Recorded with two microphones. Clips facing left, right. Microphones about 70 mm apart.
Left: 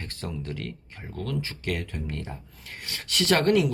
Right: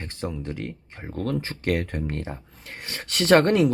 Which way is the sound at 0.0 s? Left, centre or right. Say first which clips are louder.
Right 4 dB; centre.